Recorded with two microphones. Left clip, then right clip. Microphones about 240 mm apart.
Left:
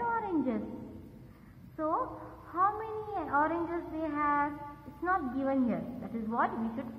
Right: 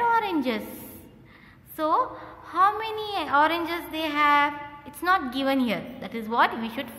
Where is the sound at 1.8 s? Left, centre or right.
Right.